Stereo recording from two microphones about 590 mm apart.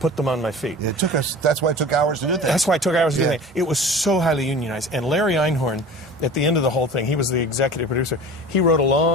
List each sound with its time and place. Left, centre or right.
0.0 s speech: centre
0.9 s speech: right
2.3 s speech: centre
6.3 s speech: left
8.5 s speech: left